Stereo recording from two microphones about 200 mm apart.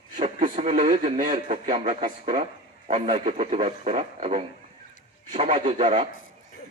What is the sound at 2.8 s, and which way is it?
Speech, 30° right (ahead or behind).